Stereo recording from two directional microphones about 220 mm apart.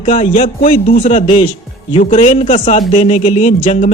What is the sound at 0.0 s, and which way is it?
A man's voice, 30° left (ahead or behind).